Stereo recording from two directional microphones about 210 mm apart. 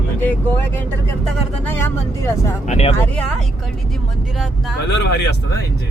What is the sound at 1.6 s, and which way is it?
Speech, 10° left (ahead or behind).